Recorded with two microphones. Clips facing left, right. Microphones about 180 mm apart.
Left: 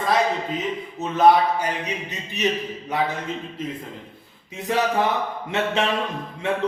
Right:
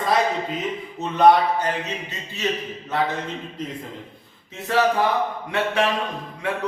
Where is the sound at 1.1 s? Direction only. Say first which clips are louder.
Right 1 dB; 5° left (ahead or behind).